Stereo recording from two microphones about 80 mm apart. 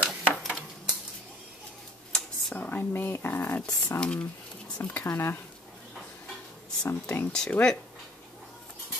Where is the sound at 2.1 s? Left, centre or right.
Centre.